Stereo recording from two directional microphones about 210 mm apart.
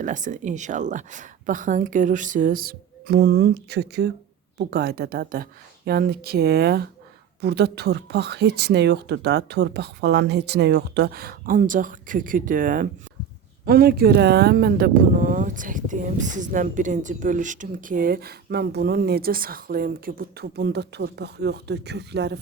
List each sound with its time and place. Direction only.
0.0 s a woman's voice: 35° right (ahead or behind); by 22.4 s 55° right (ahead or behind)